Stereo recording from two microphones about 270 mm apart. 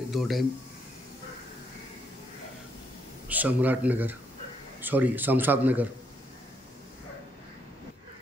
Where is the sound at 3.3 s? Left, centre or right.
Centre.